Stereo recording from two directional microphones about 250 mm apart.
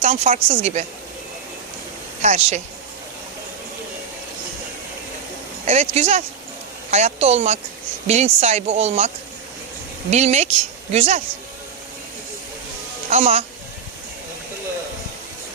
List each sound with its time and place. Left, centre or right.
0.0 s speech: right
2.2 s speech: right
5.6 s speech: right
13.1 s speech: right